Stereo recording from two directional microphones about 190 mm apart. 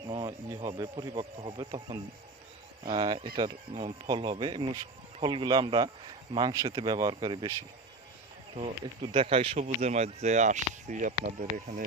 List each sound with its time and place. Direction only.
0.1 s speech: 25° right (ahead or behind)
8.5 s speech: 30° right (ahead or behind)